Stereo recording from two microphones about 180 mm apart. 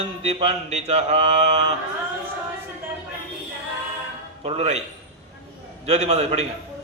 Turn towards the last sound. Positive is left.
turn(degrees=-35)  # may be behind; listen again after turning